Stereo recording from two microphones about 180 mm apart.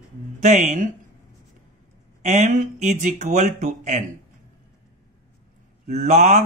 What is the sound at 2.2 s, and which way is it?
Speech, 40° right (ahead or behind).